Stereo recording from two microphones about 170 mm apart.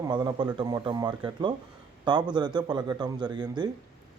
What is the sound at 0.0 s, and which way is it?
A man's voice, 25° right (ahead or behind).